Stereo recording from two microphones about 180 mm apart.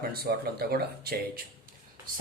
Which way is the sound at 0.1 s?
60° right (ahead or behind).